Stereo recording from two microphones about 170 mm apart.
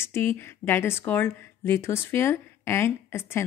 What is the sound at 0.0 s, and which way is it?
A woman's voice, 15° left (ahead or behind).